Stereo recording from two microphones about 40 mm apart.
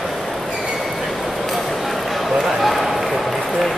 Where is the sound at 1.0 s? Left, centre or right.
Centre.